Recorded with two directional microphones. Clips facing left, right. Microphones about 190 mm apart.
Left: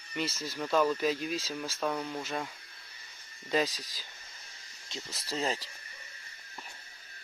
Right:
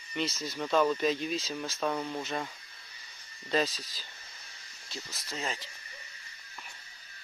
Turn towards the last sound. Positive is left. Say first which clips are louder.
# left 4 dB
turn(degrees=35)  # may be behind; listen again after turning